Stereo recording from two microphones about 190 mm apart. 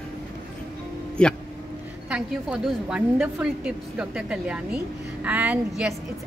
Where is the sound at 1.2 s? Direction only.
5° left (ahead or behind).